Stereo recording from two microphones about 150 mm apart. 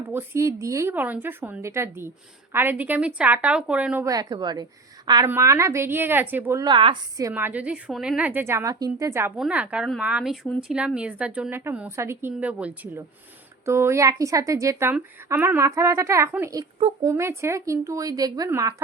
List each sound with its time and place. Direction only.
0.1 s a woman's voice: 15° right (ahead or behind)
4.0 s a woman's voice: 25° right (ahead or behind)
6.7 s a woman's voice: 30° right (ahead or behind)
7.2 s a woman's voice: 20° right (ahead or behind)